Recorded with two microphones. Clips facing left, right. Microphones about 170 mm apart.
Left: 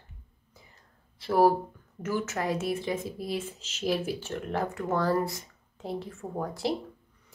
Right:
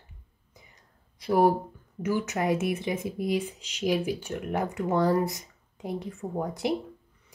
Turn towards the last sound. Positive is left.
turn(degrees=-20)  # may be behind; listen again after turning